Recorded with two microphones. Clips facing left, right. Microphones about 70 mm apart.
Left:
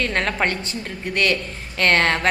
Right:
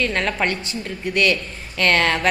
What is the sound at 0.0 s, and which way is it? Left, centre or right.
A woman's voice, left.